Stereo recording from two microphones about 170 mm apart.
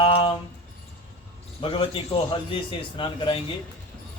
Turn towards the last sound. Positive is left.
turn(degrees=30)  # may be behind; listen again after turning